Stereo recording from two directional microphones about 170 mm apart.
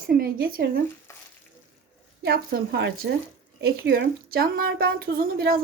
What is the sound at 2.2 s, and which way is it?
Speech, 65° right (ahead or behind).